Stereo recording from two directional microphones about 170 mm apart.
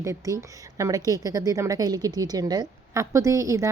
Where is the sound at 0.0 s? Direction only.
20° right (ahead or behind).